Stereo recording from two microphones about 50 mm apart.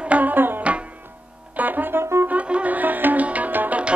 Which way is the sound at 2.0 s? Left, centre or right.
Right.